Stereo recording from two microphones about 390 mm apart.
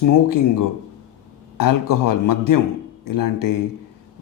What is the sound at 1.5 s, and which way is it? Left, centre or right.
Speech, left.